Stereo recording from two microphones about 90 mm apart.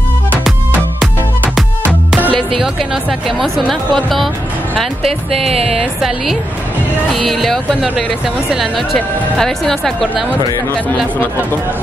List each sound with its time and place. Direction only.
2.3 s music: centre (ahead or behind)
3.3 s speech: centre (ahead or behind)
5.0 s music: 90° right
7.1 s speech: centre (ahead or behind)